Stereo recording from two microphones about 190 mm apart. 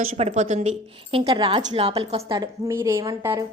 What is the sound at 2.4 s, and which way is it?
A woman's voice, 15° right (ahead or behind).